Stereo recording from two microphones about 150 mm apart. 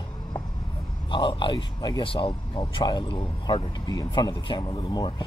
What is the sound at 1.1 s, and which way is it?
Speech, 35° left (ahead or behind).